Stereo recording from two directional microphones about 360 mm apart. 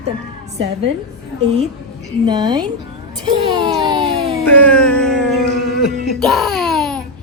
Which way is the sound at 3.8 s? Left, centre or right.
Centre.